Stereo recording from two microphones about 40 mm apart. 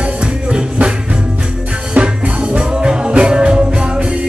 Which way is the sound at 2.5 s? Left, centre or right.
Right.